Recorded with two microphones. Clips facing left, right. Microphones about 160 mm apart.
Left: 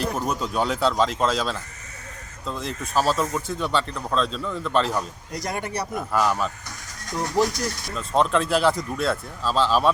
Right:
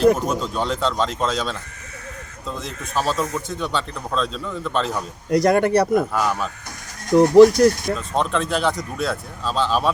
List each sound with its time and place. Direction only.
0.5 s speech: 10° left (ahead or behind)
2.6 s speech: centre (ahead or behind)
5.3 s speech: 70° right (ahead or behind)
6.1 s speech: centre (ahead or behind)
7.1 s speech: 60° right (ahead or behind)
7.9 s speech: centre (ahead or behind)